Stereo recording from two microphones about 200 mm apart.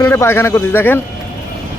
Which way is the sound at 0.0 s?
15° left (ahead or behind).